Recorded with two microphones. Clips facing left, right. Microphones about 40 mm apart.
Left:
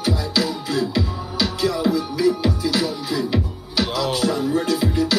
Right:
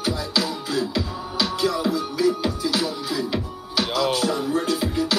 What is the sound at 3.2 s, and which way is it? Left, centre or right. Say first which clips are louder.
Music: left 5 dB; centre.